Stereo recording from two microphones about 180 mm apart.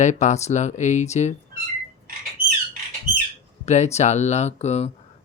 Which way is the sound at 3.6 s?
40° left (ahead or behind).